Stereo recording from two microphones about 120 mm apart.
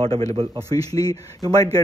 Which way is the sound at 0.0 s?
55° right (ahead or behind).